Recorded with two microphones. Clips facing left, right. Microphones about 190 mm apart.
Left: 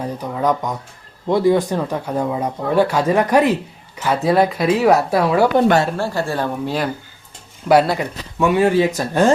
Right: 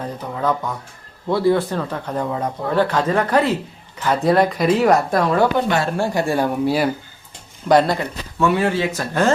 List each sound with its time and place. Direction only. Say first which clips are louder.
0.0 s speech: left 3 dB; 15° left (ahead or behind)
6.0 s speech: right 2 dB; 15° right (ahead or behind)
7.7 s speech: left 1 dB; 5° left (ahead or behind)